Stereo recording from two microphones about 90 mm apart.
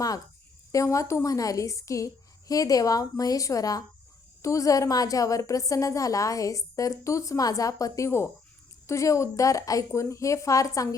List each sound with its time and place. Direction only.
0.7 s a woman's voice: 35° left (ahead or behind)